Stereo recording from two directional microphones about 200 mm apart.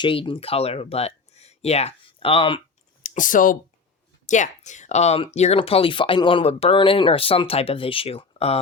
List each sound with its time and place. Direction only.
0.0 s speech: 25° left (ahead or behind)
3.0 s speech: 40° left (ahead or behind)